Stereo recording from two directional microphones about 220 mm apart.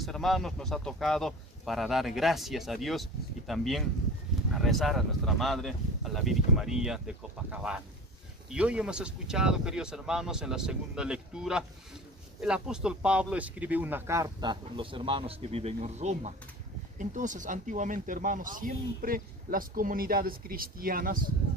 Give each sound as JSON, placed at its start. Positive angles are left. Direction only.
{"t": 0.0, "sound": "speech", "side_deg": 0}